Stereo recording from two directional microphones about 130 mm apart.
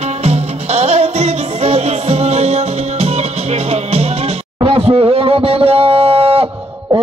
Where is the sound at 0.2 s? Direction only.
55° right (ahead or behind).